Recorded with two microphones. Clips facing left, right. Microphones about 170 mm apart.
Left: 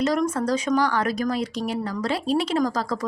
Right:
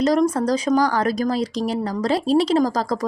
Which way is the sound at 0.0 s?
35° right (ahead or behind).